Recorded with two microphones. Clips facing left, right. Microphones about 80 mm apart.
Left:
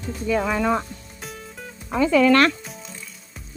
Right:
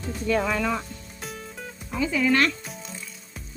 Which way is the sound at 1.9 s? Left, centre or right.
Left.